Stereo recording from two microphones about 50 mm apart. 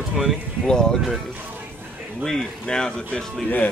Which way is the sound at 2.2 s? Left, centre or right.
Centre.